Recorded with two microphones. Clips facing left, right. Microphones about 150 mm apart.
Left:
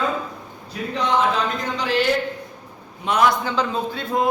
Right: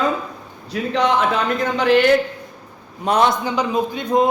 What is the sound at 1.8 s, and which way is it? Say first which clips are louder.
Speech: right 7 dB; 55° right (ahead or behind).